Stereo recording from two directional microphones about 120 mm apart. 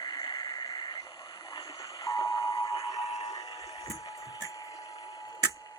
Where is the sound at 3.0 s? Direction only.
60° left (ahead or behind).